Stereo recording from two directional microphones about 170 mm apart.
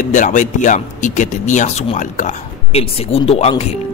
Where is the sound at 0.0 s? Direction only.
45° left (ahead or behind).